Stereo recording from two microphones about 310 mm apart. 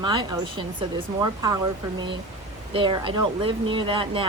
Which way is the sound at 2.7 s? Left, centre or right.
Centre.